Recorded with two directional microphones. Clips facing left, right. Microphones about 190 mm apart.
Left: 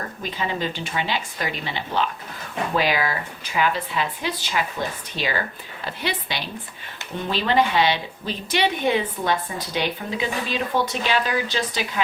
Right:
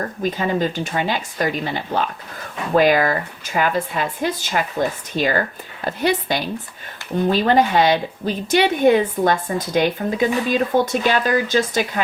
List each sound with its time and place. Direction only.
0.2 s a woman's voice: 45° right (ahead or behind)